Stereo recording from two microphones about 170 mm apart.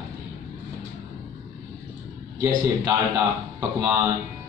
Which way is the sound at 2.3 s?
20° right (ahead or behind).